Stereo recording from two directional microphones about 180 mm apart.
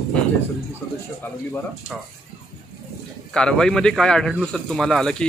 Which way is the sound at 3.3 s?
5° left (ahead or behind).